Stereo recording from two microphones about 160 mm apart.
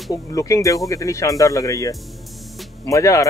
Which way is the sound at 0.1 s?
20° left (ahead or behind).